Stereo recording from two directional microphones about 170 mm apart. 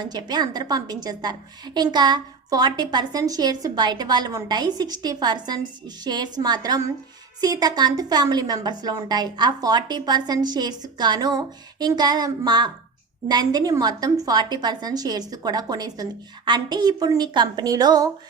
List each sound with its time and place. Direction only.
0.0 s a woman's voice: 25° right (ahead or behind)